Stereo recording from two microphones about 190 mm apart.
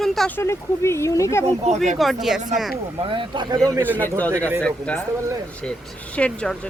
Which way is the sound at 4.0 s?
10° left (ahead or behind).